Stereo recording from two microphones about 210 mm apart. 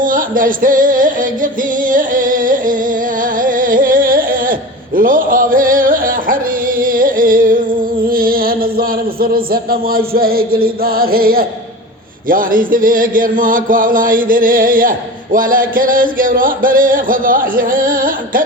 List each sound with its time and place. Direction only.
0.0 s chant: 40° right (ahead or behind)
1.9 s singing: 40° right (ahead or behind)
3.4 s music: 40° right (ahead or behind)
8.1 s a sound: 45° right (ahead or behind)
10.1 s music: 45° right (ahead or behind)
12.3 s chant: 40° right (ahead or behind)